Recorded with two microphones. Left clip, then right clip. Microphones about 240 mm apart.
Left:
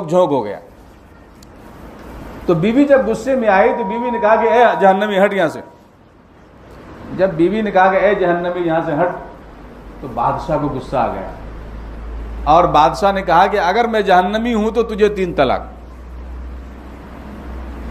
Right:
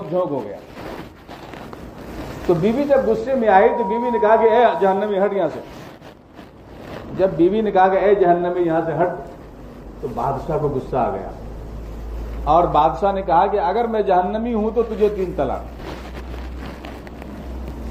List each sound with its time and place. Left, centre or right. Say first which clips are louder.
0.1 s speech: left 8 dB; left
2.6 s speech: left 6 dB; left
7.2 s speech: left 2 dB; left
10.9 s speech: left 4 dB; left
12.4 s speech: left 4 dB; left